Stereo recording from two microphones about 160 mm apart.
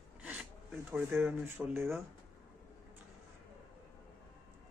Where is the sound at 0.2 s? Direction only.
10° right (ahead or behind).